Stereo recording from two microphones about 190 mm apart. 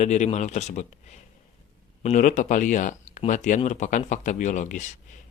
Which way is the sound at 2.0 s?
40° left (ahead or behind).